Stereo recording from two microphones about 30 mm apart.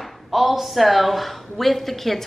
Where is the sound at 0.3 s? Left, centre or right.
Centre.